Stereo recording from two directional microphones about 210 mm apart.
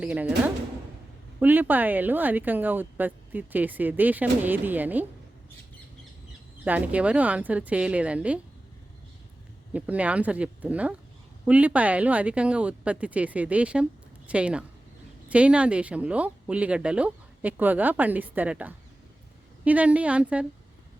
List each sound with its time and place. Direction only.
0.0 s speech: 5° right (ahead or behind)
6.7 s speech: 5° right (ahead or behind)
9.7 s speech: 5° right (ahead or behind)